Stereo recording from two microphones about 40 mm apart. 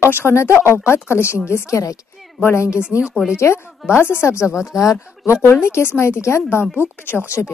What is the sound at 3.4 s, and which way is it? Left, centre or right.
Speech, left.